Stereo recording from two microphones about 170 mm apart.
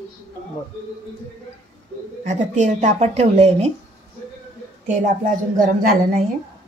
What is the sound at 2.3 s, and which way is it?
Speech, 45° right (ahead or behind).